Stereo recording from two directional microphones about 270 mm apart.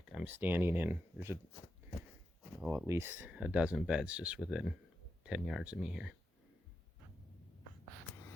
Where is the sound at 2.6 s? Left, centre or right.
Centre.